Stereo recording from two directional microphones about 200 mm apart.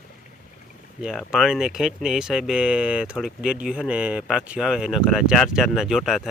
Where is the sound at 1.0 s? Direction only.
Centre (ahead or behind).